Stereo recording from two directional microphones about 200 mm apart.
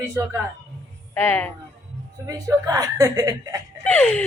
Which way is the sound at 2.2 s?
15° right (ahead or behind).